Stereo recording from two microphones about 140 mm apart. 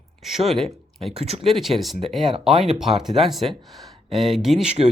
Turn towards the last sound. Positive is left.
turn(degrees=0)  # may be behind; listen again after turning